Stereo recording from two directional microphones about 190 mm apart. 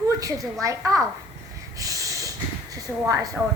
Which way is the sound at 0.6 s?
15° right (ahead or behind).